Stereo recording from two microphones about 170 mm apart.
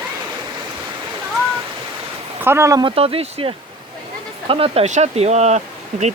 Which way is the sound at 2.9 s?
35° right (ahead or behind).